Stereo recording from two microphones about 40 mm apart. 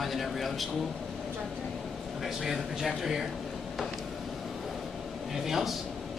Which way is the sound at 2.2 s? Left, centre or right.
Centre.